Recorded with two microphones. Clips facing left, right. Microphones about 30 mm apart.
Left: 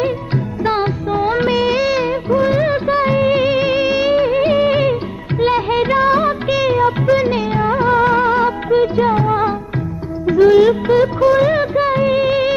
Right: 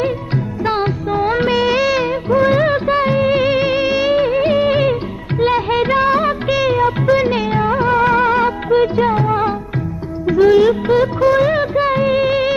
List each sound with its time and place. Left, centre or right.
0.7 s music: centre
2.0 s music of bollywood: centre
2.3 s music of bollywood: right
3.1 s music: centre
5.4 s music of bollywood: centre
8.0 s music: right
8.5 s music of bollywood: centre